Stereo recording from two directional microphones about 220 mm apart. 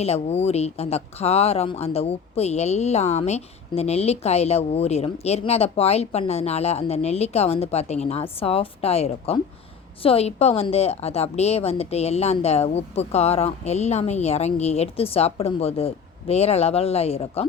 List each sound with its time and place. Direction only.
0.0 s speech: 30° left (ahead or behind)